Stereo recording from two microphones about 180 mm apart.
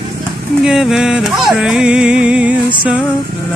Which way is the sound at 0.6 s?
Centre (ahead or behind).